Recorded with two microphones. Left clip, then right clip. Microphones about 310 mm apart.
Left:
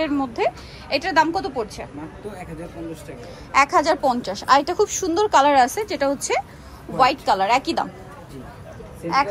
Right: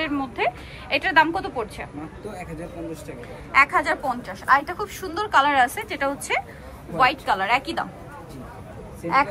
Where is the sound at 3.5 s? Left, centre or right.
Centre.